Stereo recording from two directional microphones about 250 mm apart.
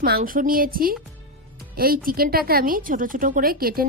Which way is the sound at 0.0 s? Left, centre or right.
Right.